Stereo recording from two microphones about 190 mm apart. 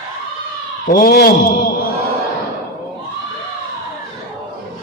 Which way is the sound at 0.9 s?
50° left (ahead or behind).